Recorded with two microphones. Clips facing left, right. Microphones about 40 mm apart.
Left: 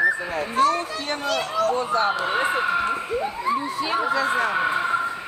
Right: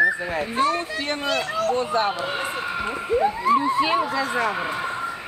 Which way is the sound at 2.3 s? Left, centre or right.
Centre.